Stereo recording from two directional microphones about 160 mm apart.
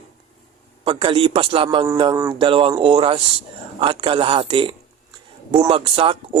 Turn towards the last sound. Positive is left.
turn(degrees=-35)  # may be behind; listen again after turning